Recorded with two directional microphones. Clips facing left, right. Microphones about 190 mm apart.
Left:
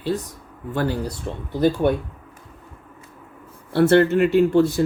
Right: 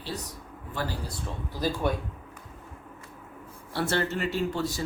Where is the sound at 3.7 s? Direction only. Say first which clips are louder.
Left 13 dB; 60° left (ahead or behind).